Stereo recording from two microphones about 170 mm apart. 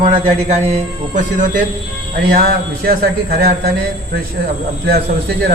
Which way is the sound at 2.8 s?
60° right (ahead or behind).